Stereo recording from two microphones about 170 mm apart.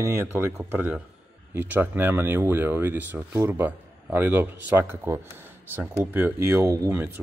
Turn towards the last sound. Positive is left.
turn(degrees=-15)  # may be behind; listen again after turning